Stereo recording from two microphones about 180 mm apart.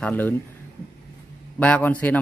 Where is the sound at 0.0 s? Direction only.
10° left (ahead or behind).